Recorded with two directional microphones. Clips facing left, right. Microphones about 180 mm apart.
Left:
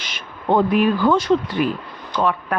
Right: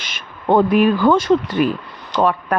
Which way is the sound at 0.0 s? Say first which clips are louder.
Right 2 dB; 50° right (ahead or behind).